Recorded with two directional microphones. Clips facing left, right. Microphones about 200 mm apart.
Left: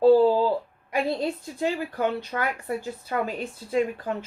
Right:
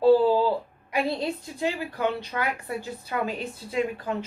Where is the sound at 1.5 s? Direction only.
45° left (ahead or behind).